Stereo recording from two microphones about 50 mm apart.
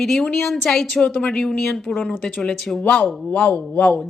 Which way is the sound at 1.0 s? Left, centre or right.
Left.